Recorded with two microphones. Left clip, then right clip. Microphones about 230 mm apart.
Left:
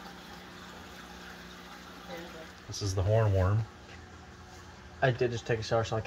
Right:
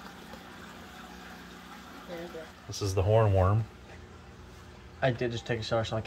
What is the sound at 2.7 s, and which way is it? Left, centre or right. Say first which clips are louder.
Speech: right 4 dB; centre.